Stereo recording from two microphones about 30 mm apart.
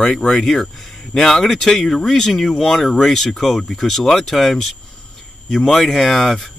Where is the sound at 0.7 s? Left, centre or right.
Centre.